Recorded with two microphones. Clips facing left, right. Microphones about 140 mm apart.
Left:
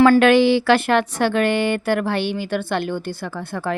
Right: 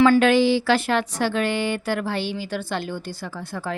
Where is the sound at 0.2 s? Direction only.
65° left (ahead or behind).